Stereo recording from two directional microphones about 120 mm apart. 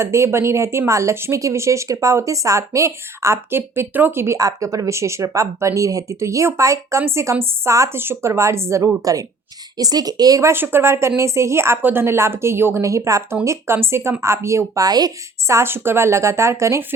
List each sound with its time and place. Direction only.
0.0 s speech: 20° right (ahead or behind)